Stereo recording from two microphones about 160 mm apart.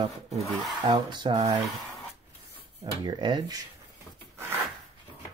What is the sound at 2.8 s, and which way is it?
Speech, 25° right (ahead or behind).